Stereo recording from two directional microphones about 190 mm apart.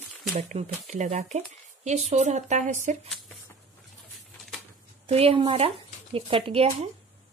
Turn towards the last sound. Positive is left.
turn(degrees=-30)  # may be behind; listen again after turning